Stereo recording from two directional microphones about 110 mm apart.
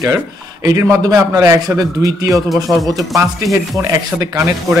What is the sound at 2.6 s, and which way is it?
Speech, centre (ahead or behind).